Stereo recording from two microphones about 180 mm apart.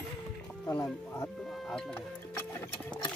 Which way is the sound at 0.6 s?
15° left (ahead or behind).